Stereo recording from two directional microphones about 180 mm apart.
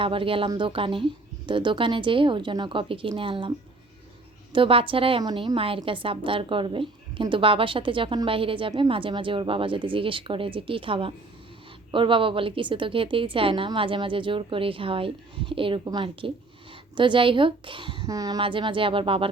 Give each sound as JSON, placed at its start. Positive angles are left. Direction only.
{"t": 0.0, "sound": "a woman's voice", "side_deg": -30}
{"t": 4.5, "sound": "a woman's voice", "side_deg": -30}